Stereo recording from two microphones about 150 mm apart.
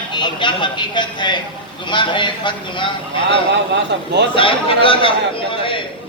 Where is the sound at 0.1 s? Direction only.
30° left (ahead or behind).